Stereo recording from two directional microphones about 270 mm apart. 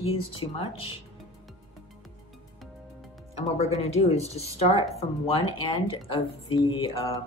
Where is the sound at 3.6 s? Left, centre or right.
Left.